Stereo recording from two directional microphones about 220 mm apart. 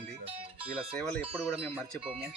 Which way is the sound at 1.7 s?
5° left (ahead or behind).